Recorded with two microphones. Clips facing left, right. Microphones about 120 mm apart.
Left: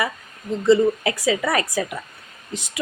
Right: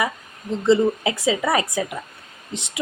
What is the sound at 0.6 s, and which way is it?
A woman's voice, 25° right (ahead or behind).